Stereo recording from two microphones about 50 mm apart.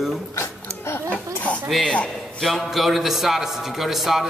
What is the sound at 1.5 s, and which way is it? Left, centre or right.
Speech, left.